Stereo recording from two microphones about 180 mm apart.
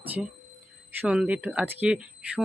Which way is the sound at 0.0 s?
10° right (ahead or behind).